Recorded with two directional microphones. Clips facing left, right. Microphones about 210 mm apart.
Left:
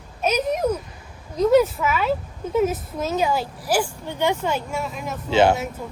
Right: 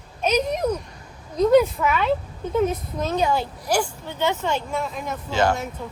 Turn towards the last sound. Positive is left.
turn(degrees=20)  # may be behind; listen again after turning